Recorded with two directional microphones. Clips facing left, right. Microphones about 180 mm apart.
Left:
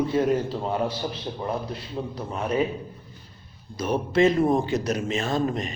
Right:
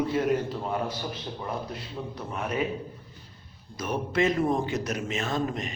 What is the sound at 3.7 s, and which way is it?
A man's voice, 30° left (ahead or behind).